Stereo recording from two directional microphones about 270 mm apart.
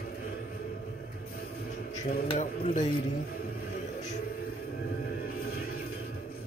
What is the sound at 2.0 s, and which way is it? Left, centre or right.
Speech, left.